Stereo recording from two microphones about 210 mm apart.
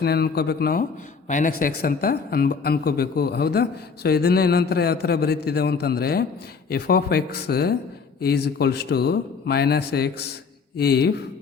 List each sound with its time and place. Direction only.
0.0 s speech: 50° left (ahead or behind)